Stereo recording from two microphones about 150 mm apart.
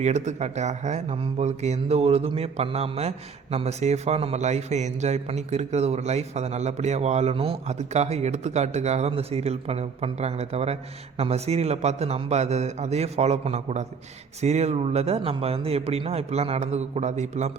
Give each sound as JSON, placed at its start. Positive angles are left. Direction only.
{"t": 0.0, "sound": "speech", "side_deg": -50}